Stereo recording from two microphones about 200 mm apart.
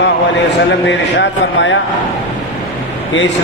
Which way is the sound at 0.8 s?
65° left (ahead or behind).